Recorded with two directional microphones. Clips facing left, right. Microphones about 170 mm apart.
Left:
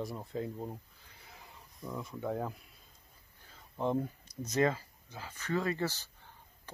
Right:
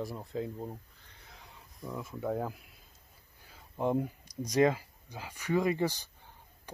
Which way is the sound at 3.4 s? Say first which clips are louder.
Right 2 dB; 10° right (ahead or behind).